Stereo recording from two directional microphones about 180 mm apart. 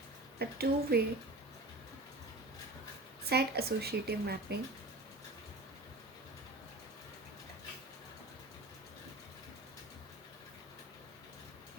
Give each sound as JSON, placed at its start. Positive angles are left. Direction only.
{"t": 0.3, "sound": "speech", "side_deg": -60}
{"t": 3.2, "sound": "speech", "side_deg": -65}